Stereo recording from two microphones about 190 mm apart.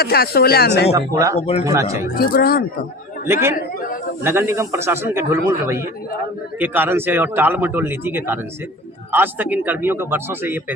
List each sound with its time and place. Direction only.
0.0 s speech: 55° left (ahead or behind)
0.9 s a man's voice: 15° right (ahead or behind)
1.4 s speech: 35° left (ahead or behind)
1.6 s a man's voice: 15° right (ahead or behind)
2.1 s speech: 55° left (ahead or behind)
3.2 s a man's voice: 10° right (ahead or behind)
3.5 s a man's voice: 45° left (ahead or behind)
4.2 s a man's voice: 15° right (ahead or behind)